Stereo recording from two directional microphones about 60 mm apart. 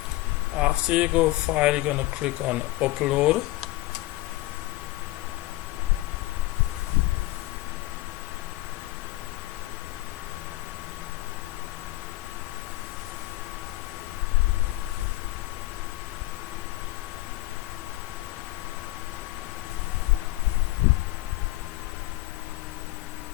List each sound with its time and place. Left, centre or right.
0.6 s speech: centre